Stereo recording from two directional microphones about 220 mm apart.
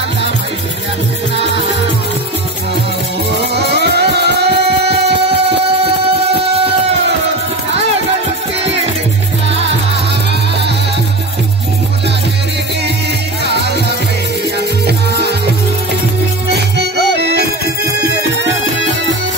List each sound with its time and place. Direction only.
3.3 s music: 50° right (ahead or behind)
13.5 s music: 50° right (ahead or behind)